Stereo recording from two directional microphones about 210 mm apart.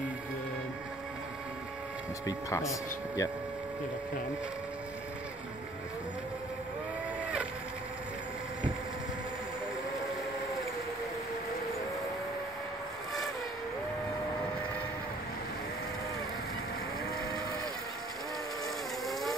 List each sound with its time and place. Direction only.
2.2 s speech: 15° left (ahead or behind)